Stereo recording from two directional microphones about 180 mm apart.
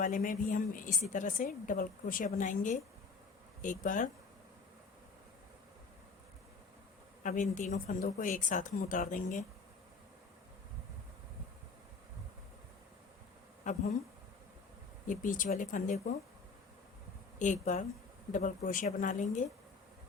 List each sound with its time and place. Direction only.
0.0 s speech: 50° left (ahead or behind)
7.2 s speech: 45° left (ahead or behind)
13.7 s speech: 45° left (ahead or behind)
15.0 s speech: 45° left (ahead or behind)
17.4 s speech: 45° left (ahead or behind)